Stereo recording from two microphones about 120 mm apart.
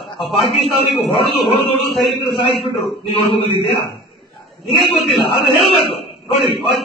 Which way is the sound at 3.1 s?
50° left (ahead or behind).